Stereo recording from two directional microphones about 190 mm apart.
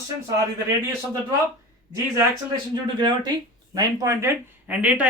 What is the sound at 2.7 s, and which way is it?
Speech, 25° right (ahead or behind).